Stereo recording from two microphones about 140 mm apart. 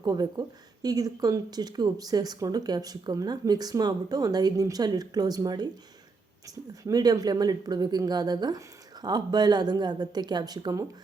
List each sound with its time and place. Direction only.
0.0 s speech: 30° right (ahead or behind)
6.8 s speech: 30° right (ahead or behind)